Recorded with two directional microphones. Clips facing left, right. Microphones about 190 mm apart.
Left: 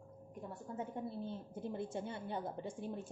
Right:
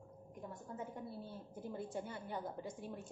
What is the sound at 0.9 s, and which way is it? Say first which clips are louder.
A woman's voice: left 5 dB; 25° left (ahead or behind).